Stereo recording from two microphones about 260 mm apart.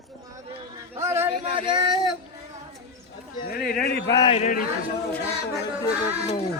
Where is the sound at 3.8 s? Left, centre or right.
Left.